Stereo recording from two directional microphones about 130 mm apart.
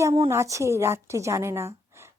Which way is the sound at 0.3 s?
20° right (ahead or behind).